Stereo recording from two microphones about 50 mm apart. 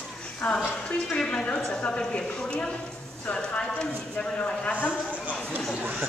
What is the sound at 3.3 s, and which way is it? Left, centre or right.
Clip-clop, centre.